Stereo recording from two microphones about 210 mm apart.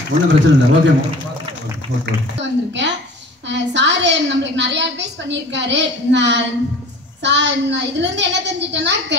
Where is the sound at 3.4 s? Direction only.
55° right (ahead or behind).